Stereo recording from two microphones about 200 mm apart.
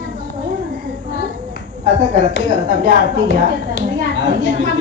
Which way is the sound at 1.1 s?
65° left (ahead or behind).